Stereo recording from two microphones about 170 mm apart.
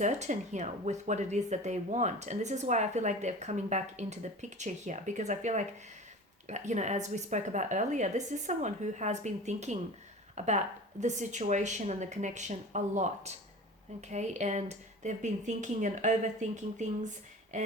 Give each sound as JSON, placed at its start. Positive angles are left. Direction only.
{"t": 0.0, "sound": "speech", "side_deg": -45}